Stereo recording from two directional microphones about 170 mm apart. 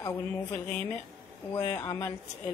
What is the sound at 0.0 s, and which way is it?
Speech, 15° left (ahead or behind).